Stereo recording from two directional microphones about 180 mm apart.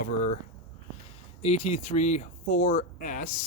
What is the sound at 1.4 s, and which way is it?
Speech, 40° left (ahead or behind).